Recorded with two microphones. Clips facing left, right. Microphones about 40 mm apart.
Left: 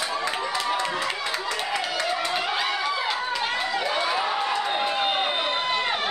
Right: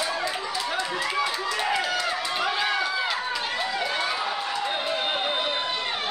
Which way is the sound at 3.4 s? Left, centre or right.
Centre.